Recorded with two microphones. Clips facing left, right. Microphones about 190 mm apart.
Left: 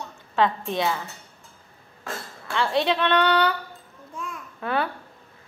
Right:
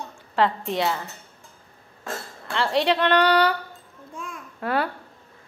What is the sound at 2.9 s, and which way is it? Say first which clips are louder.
Speech: right 2 dB; 35° right (ahead or behind).